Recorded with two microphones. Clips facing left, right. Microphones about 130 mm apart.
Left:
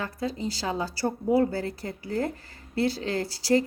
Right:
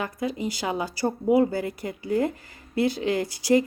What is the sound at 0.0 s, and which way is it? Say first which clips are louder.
Speech: right 2 dB; 15° right (ahead or behind).